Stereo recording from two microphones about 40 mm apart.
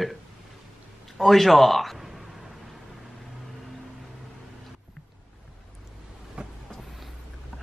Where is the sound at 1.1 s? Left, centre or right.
Centre.